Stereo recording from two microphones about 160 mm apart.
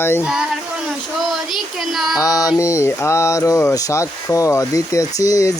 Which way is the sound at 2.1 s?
20° left (ahead or behind).